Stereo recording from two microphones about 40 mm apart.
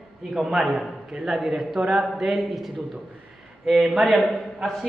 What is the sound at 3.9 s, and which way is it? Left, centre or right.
A man's voice, centre.